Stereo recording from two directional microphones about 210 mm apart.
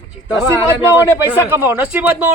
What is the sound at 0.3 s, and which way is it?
A man's voice, 10° right (ahead or behind).